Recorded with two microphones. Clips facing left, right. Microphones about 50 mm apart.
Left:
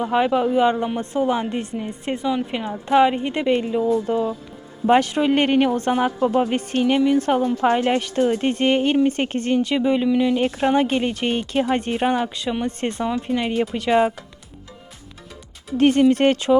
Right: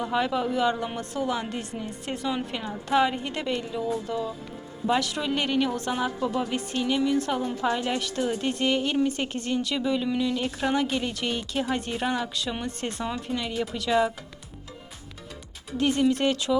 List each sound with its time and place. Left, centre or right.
0.0 s a woman's voice: left
15.8 s speech: left